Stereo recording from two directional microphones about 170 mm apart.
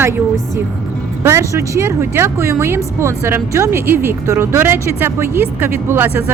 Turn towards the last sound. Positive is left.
turn(degrees=-15)  # may be behind; listen again after turning